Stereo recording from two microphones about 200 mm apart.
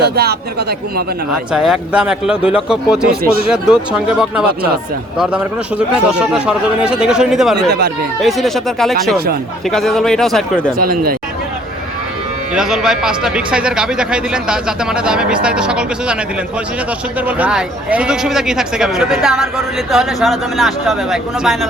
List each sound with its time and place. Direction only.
0.0 s speech: 55° right (ahead or behind)
1.3 s speech: 5° right (ahead or behind)
7.7 s speech: 55° right (ahead or behind)
8.2 s speech: centre (ahead or behind)
12.5 s speech: centre (ahead or behind)
17.2 s speech: 10° right (ahead or behind)